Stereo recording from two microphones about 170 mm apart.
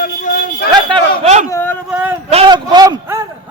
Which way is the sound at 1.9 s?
10° right (ahead or behind).